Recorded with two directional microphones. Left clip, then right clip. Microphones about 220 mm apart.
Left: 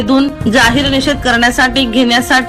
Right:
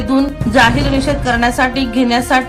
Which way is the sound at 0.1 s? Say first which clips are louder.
Left 2 dB; 10° left (ahead or behind).